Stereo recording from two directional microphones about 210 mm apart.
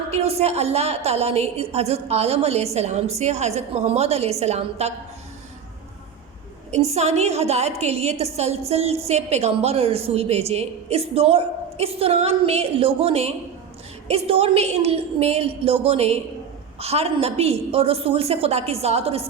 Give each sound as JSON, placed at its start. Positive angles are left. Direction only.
{"t": 0.1, "sound": "a woman's voice", "side_deg": -30}
{"t": 6.7, "sound": "a woman's voice", "side_deg": -30}